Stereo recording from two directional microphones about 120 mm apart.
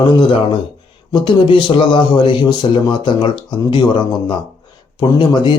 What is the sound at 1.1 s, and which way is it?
Speech, 45° left (ahead or behind).